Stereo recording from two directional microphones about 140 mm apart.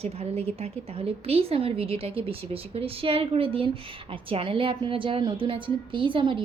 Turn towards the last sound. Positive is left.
turn(degrees=-35)  # may be behind; listen again after turning